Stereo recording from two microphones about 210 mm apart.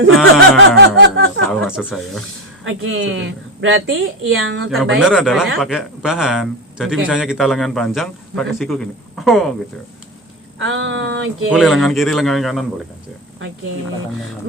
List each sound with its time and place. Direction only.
0.8 s a sound: 60° right (ahead or behind)
1.5 s speech: 5° right (ahead or behind)
2.6 s a woman's voice: 65° right (ahead or behind)
4.7 s a man's voice: centre (ahead or behind)
10.6 s a woman's voice: 60° right (ahead or behind)
11.5 s a man's voice: centre (ahead or behind)